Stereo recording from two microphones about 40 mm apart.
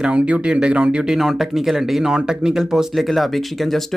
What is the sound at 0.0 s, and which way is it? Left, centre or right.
Speech, right.